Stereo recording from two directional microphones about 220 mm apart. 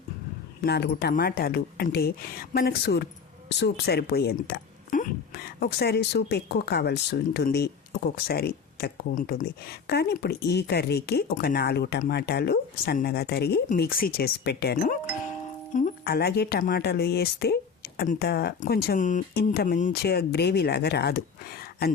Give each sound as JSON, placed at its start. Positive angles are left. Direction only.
{"t": 0.6, "sound": "a woman's voice", "side_deg": 50}